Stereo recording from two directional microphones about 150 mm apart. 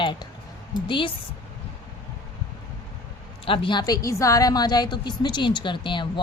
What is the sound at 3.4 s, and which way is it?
A woman's voice, 35° left (ahead or behind).